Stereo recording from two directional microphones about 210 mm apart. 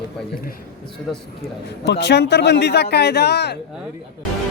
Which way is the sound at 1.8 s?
55° left (ahead or behind).